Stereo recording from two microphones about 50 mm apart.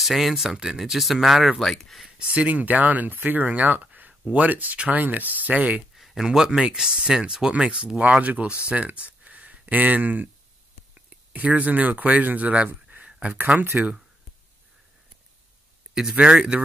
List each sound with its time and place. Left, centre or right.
0.0 s speech: centre
2.1 s speech: right
5.9 s a sound: centre
6.2 s speech: centre; by 13.3 s right
13.6 s speech: right
15.9 s speech: centre